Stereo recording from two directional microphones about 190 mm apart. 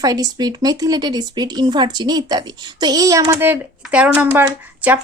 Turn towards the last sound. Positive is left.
turn(degrees=-10)  # may be behind; listen again after turning